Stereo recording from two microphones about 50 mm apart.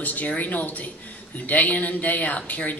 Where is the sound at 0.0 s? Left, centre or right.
Left.